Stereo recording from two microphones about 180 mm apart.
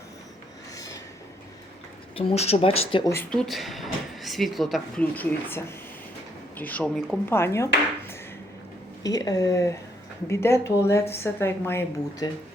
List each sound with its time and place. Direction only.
2.1 s speech: 35° left (ahead or behind)
3.1 s a woman's voice: 10° left (ahead or behind)
7.3 s a woman's voice: 15° left (ahead or behind)